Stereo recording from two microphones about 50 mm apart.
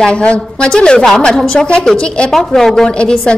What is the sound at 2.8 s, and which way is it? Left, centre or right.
Speech, centre.